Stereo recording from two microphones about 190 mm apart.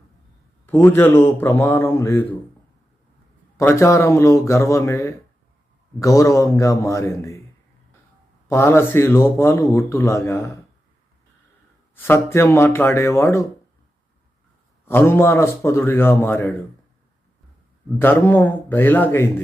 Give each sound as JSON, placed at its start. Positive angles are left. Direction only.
{"t": 0.6, "sound": "speech", "side_deg": 10}
{"t": 3.6, "sound": "speech", "side_deg": 15}
{"t": 8.4, "sound": "speech", "side_deg": 15}
{"t": 11.9, "sound": "speech", "side_deg": 10}
{"t": 14.8, "sound": "speech", "side_deg": 10}
{"t": 18.0, "sound": "speech", "side_deg": 10}